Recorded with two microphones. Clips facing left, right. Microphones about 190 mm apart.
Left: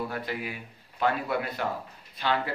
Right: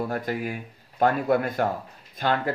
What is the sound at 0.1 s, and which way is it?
Speech, 45° right (ahead or behind).